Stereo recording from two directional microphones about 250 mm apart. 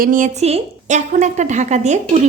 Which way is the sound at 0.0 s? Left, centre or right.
Right.